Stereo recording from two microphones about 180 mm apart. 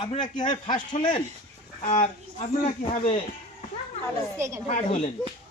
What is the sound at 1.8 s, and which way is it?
Speech, 45° left (ahead or behind).